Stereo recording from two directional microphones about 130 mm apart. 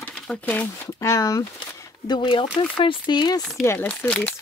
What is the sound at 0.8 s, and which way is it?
Speech, 25° left (ahead or behind).